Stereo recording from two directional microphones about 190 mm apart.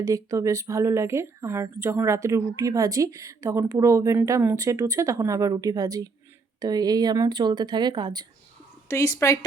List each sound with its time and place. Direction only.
0.0 s speech: 15° right (ahead or behind)
8.9 s a woman's voice: 15° left (ahead or behind)